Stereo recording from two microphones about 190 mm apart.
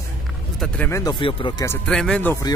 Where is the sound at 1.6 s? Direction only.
5° left (ahead or behind).